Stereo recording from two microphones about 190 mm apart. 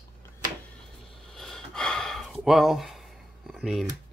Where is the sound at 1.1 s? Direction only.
Centre (ahead or behind).